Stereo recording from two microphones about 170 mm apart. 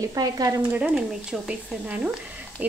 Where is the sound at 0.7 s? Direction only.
5° right (ahead or behind).